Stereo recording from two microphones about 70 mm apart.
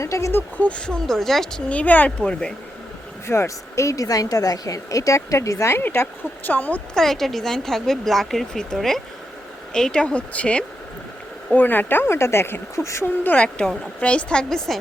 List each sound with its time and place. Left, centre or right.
0.0 s speech: left
0.3 s speech: left; by 1.6 s centre
1.7 s speech: left
3.2 s a woman's voice: left
5.7 s speech: left
6.9 s speech: centre
11.5 s speech: left
12.8 s a woman's voice: left
13.2 s speech: left